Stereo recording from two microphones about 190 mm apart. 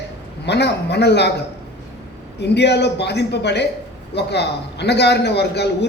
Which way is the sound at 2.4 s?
60° left (ahead or behind).